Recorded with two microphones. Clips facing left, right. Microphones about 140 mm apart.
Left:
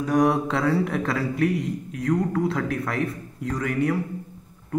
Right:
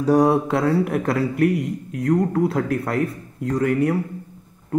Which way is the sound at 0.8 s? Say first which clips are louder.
Right 4 dB; 15° right (ahead or behind).